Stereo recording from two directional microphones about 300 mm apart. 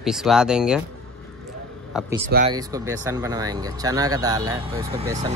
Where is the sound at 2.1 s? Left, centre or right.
Right.